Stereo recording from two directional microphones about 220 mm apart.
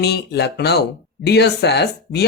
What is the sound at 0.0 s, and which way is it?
Speech, 50° left (ahead or behind).